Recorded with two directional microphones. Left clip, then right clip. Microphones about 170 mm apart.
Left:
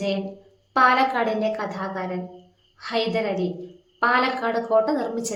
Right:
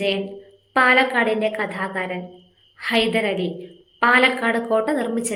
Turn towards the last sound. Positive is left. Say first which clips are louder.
# even
turn(degrees=-5)  # may be behind; listen again after turning